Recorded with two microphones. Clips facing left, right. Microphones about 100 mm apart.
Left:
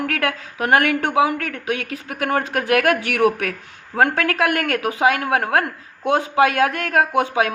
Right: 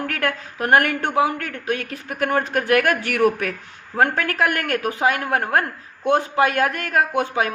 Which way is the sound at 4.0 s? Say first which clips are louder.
Left 1 dB; 90° left.